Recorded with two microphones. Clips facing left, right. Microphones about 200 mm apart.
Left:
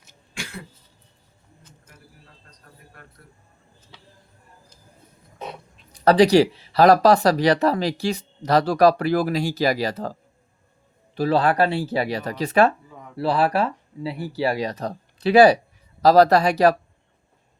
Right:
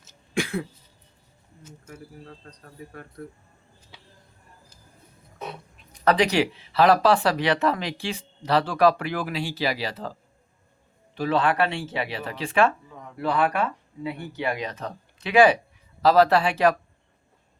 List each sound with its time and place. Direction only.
5.9 s speech: 35° left (ahead or behind)